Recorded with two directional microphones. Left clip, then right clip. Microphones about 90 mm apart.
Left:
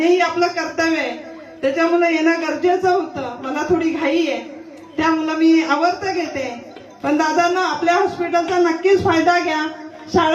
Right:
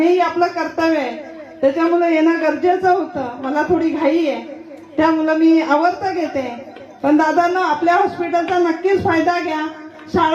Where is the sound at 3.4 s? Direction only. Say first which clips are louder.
Right 2 dB; 30° right (ahead or behind).